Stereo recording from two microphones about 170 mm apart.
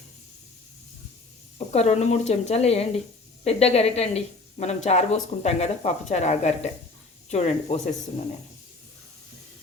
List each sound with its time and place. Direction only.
1.5 s a woman's voice: 40° left (ahead or behind)